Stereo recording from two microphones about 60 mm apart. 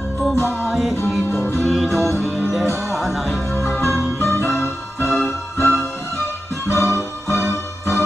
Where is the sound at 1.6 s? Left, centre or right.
Centre.